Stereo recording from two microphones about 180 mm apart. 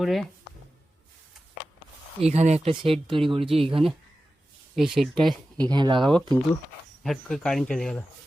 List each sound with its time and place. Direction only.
0.0 s speech: centre (ahead or behind)
2.2 s speech: 35° right (ahead or behind)
4.7 s speech: centre (ahead or behind)
5.6 s speech: 25° right (ahead or behind)
7.0 s speech: centre (ahead or behind)